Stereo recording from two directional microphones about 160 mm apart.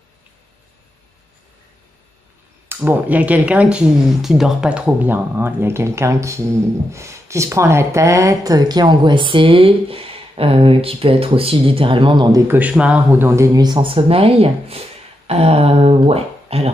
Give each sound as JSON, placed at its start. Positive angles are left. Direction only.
{"t": 2.7, "sound": "speech", "side_deg": -10}
{"t": 12.5, "sound": "speech", "side_deg": -10}